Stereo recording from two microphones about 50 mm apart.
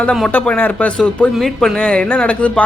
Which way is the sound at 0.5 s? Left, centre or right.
Left.